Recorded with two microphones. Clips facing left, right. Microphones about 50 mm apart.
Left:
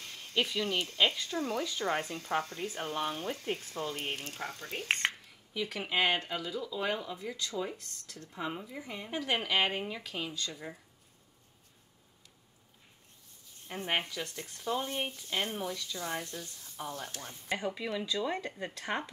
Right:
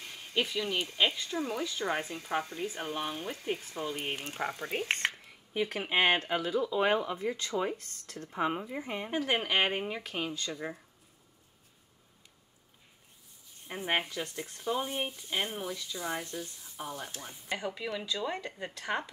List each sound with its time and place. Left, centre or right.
0.0 s speech: centre
5.0 s a sound: centre
5.5 s speech: right
13.7 s speech: centre
17.2 s stir: centre
18.1 s speech: centre
18.8 s speech: centre